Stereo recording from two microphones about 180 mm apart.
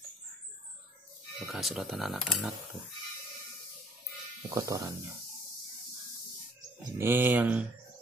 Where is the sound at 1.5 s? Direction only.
Centre (ahead or behind).